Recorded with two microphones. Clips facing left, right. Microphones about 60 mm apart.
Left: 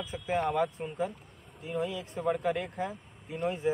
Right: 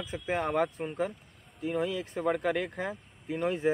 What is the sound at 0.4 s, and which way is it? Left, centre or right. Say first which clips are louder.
Speech: even; right.